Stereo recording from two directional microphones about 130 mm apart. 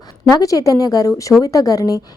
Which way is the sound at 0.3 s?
30° left (ahead or behind).